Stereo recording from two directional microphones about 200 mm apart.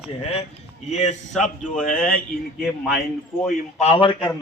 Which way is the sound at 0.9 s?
35° left (ahead or behind).